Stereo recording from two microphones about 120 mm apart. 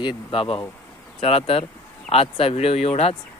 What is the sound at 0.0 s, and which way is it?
Speech, 40° left (ahead or behind).